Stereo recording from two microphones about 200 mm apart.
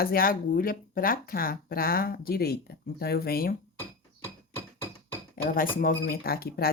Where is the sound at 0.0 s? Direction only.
45° left (ahead or behind).